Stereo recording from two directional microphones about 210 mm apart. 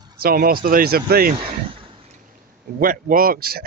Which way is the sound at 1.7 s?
25° right (ahead or behind).